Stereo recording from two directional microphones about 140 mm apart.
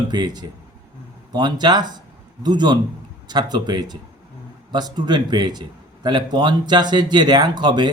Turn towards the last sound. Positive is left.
turn(degrees=-35)  # may be behind; listen again after turning